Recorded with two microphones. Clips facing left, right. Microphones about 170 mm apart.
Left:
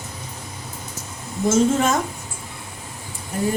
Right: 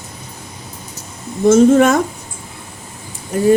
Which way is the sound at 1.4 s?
65° right (ahead or behind).